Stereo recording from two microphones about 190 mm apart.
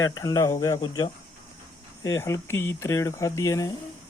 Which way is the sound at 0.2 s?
20° left (ahead or behind).